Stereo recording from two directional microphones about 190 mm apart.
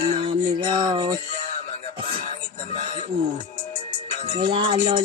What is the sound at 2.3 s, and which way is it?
Music, 35° left (ahead or behind).